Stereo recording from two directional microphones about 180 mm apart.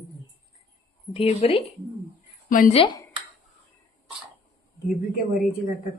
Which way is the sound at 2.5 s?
50° left (ahead or behind).